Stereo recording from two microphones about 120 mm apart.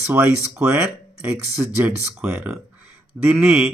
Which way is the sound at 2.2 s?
20° right (ahead or behind).